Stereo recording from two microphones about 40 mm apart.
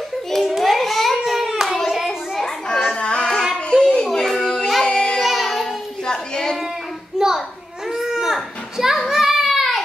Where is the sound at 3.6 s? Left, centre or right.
Left.